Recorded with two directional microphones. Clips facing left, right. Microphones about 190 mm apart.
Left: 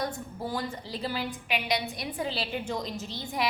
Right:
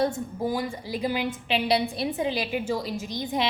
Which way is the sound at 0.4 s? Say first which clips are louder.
Right 5 dB; 10° right (ahead or behind).